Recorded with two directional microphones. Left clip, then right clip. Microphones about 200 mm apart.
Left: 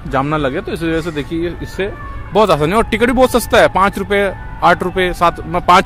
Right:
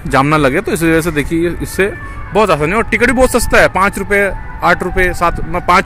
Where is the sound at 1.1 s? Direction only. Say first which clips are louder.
Right 5 dB; 20° left (ahead or behind).